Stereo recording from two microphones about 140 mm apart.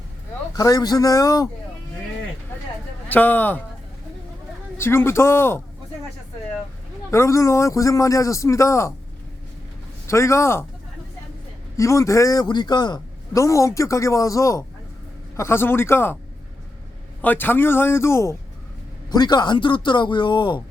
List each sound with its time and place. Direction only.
0.5 s a man's voice: 25° left (ahead or behind)
3.1 s a man's voice: 10° left (ahead or behind)
4.8 s a man's voice: 15° left (ahead or behind)
7.1 s a man's voice: 20° left (ahead or behind)
10.1 s a man's voice: 20° left (ahead or behind)
11.8 s a man's voice: 20° left (ahead or behind)
17.2 s a man's voice: 15° left (ahead or behind)
19.1 s speech: 30° left (ahead or behind)